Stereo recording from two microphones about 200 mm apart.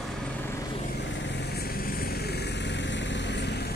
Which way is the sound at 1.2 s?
60° left (ahead or behind).